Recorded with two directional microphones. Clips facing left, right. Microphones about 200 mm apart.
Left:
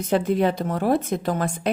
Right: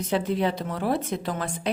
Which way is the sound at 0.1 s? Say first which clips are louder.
Left 5 dB; 50° left (ahead or behind).